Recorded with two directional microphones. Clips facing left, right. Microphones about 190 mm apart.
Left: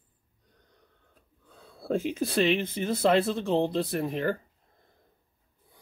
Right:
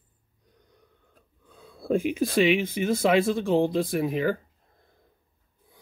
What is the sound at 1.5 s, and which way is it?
Speech, 15° right (ahead or behind).